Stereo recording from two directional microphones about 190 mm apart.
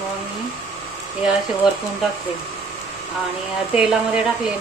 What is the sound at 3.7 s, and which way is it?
Speech, 5° right (ahead or behind).